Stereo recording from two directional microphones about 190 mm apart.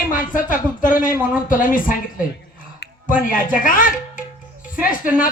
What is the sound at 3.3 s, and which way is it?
Speech, 45° left (ahead or behind).